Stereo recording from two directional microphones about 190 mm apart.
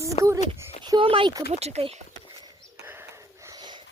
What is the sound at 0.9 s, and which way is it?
Speech, 25° right (ahead or behind).